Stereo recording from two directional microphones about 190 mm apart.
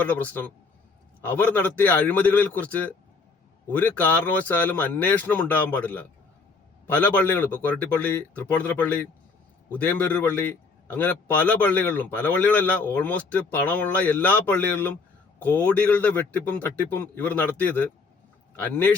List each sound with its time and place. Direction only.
0.0 s a man's voice: 10° left (ahead or behind)